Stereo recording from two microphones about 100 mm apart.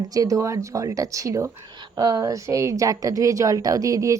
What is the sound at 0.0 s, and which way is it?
A woman's voice, 35° right (ahead or behind).